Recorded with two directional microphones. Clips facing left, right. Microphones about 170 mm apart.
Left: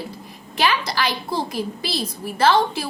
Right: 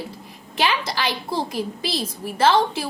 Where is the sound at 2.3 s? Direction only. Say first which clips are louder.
Even; 25° right (ahead or behind).